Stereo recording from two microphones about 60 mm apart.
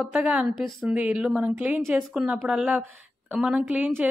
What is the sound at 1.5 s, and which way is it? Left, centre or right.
Speech, right.